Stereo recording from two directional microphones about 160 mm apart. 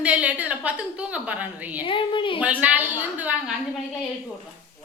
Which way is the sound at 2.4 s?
10° right (ahead or behind).